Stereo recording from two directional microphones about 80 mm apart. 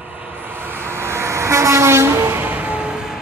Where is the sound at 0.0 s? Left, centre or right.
Right.